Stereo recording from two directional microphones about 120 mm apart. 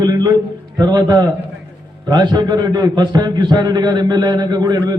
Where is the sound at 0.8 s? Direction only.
35° right (ahead or behind).